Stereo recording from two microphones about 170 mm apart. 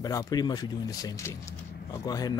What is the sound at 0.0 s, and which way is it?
Speech, 20° left (ahead or behind).